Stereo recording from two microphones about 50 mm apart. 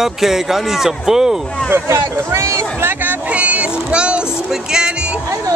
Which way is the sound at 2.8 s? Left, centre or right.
Right.